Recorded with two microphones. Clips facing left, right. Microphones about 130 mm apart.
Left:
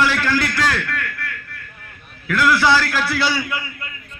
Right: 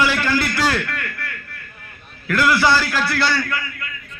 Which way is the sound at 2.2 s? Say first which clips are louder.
Even; centre (ahead or behind).